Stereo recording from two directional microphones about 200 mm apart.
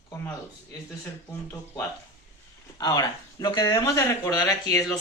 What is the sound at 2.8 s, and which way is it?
Speech, 20° left (ahead or behind).